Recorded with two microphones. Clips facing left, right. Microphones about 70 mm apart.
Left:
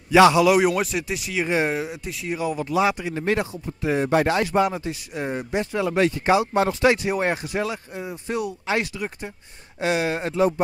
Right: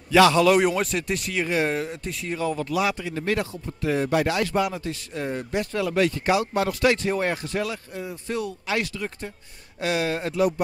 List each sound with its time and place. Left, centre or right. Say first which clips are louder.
0.1 s a man's voice: left 2 dB; centre
1.4 s speech: left 2 dB; left
1.7 s a man's voice: left 1 dB; centre